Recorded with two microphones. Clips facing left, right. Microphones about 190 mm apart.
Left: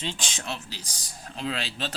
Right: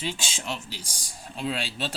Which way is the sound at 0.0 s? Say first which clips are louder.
Right 1 dB; 10° right (ahead or behind).